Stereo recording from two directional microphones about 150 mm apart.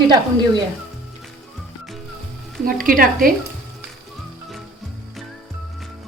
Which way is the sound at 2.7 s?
70° right (ahead or behind).